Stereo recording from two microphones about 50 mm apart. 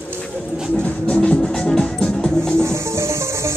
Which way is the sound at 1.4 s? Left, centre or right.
Centre.